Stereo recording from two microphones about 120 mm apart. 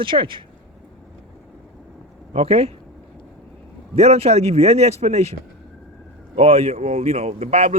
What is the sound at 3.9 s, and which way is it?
Speech, 60° right (ahead or behind).